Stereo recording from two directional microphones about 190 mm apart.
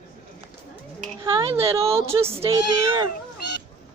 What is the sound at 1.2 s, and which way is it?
Speech, 25° right (ahead or behind).